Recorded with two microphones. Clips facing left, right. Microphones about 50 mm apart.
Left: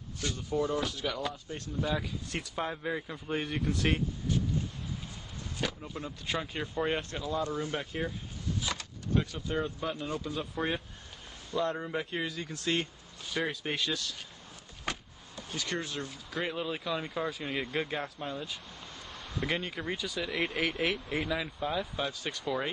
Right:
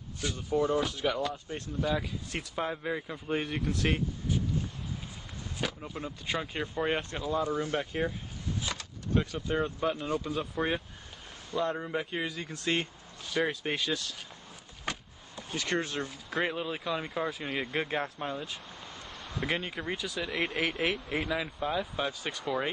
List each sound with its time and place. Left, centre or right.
0.2 s speech: centre
1.8 s speech: centre
5.6 s a sound: centre
5.9 s speech: centre
8.6 s power windows: centre
9.2 s speech: centre
10.0 s speech: centre
13.2 s speech: centre
13.7 s speech: centre
15.5 s speech: right
16.3 s speech: centre